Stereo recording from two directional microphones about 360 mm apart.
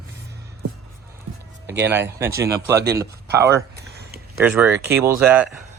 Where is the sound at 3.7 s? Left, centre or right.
Right.